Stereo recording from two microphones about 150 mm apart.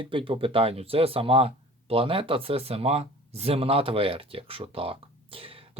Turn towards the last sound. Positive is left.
turn(degrees=-40)  # may be behind; listen again after turning